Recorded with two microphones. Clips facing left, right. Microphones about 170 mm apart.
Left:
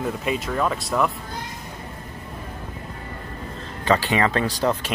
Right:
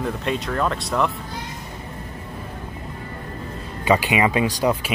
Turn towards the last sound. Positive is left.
turn(degrees=-10)  # may be behind; listen again after turning